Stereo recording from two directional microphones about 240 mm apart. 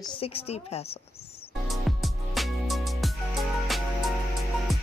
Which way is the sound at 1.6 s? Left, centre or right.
Centre.